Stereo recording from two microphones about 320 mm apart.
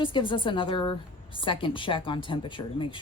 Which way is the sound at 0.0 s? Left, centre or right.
Centre.